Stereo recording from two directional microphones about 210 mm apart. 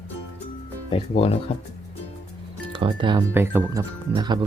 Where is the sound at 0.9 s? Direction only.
30° left (ahead or behind).